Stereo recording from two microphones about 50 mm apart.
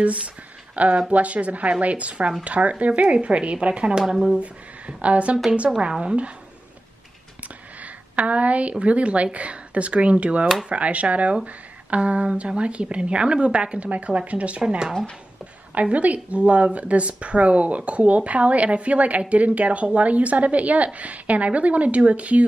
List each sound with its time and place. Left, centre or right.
0.7 s speech: right; by 4.4 s centre
4.4 s speech: right
7.8 s a woman's voice: right
14.6 s speech: centre
15.7 s speech: right